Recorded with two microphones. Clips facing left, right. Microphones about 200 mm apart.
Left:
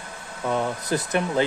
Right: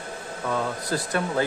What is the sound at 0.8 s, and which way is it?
Speech, 20° left (ahead or behind).